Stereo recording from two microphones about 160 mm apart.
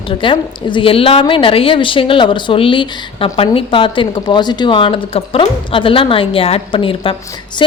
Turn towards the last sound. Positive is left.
turn(degrees=30)  # may be behind; listen again after turning